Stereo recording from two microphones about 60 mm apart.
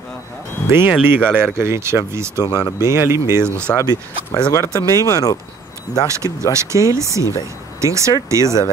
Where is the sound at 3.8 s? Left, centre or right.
Left.